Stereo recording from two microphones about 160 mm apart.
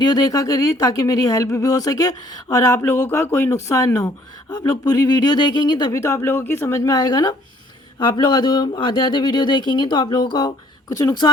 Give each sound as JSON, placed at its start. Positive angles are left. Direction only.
{"t": 0.0, "sound": "speech", "side_deg": 25}